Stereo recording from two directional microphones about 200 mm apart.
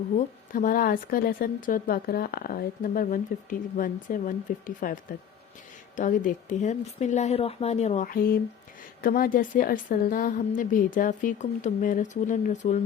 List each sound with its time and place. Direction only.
0.2 s a woman's voice: 40° left (ahead or behind)